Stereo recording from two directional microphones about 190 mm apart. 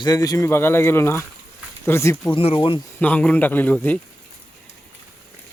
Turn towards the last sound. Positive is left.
turn(degrees=5)  # may be behind; listen again after turning